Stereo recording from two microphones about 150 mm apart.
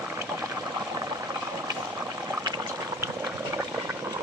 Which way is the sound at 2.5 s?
25° right (ahead or behind).